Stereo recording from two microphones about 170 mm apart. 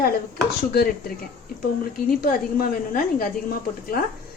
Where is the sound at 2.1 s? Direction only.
55° left (ahead or behind).